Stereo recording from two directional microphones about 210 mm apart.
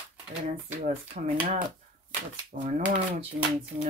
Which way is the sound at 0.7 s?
35° right (ahead or behind).